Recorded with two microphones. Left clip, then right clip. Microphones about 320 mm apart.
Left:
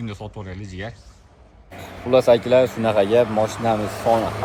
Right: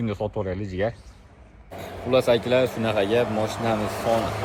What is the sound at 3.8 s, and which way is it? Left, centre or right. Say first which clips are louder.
Speech: left 1 dB; right.